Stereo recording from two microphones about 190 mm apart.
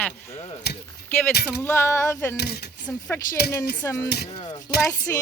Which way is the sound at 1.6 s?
15° left (ahead or behind).